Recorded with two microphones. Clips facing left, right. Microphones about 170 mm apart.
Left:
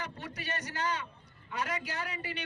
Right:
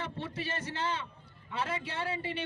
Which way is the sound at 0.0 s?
30° right (ahead or behind).